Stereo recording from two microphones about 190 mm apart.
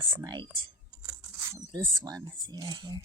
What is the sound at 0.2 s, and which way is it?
Speech, 25° right (ahead or behind).